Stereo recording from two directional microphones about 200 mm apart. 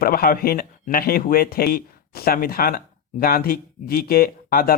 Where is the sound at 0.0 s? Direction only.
50° left (ahead or behind).